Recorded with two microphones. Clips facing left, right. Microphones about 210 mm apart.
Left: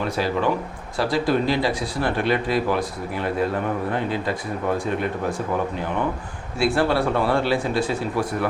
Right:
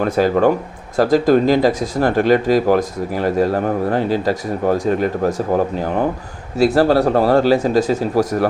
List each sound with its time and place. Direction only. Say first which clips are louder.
0.0 s speech: right 8 dB; 45° right (ahead or behind)